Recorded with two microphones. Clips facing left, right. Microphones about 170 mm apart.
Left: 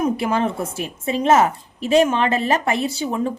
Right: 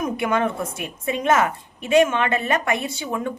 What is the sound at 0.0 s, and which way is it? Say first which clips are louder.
A woman's voice: left 2 dB; 30° left (ahead or behind).